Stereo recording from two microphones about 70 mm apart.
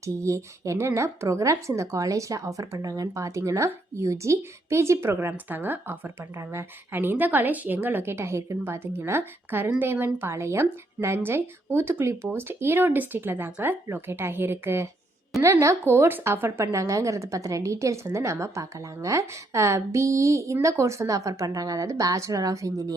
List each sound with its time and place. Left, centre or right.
0.0 s a woman's voice: right
10.2 s a woman's voice: right
15.3 s a woman's voice: centre
15.8 s a woman's voice: right
16.7 s a woman's voice: right